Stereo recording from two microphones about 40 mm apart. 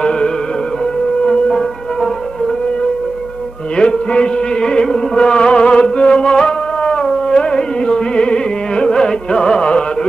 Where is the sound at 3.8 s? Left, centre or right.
Left.